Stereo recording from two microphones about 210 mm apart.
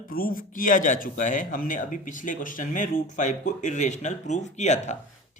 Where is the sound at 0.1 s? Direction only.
40° left (ahead or behind).